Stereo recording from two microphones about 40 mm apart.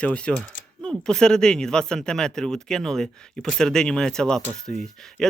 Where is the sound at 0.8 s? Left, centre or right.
Centre.